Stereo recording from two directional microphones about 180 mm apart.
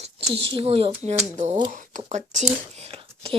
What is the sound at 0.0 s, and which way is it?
Speech, 35° right (ahead or behind).